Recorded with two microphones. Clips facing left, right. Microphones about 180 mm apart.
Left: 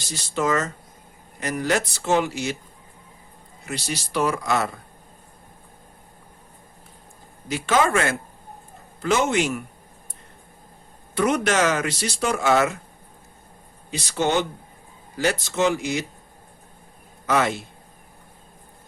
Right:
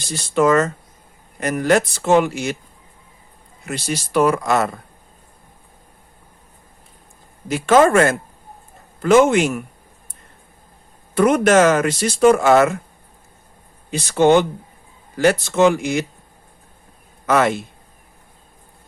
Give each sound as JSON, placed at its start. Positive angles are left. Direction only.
{"t": 0.1, "sound": "speech", "side_deg": -55}
{"t": 3.7, "sound": "speech", "side_deg": -50}
{"t": 7.4, "sound": "speech", "side_deg": -50}
{"t": 11.1, "sound": "speech", "side_deg": -50}
{"t": 13.9, "sound": "speech", "side_deg": -55}
{"t": 17.2, "sound": "a man's voice", "side_deg": -55}